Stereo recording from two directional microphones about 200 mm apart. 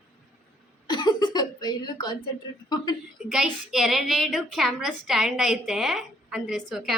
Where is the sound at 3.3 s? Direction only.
Centre (ahead or behind).